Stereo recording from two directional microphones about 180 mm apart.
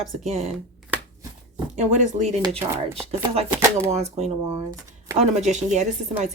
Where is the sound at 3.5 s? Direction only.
15° right (ahead or behind).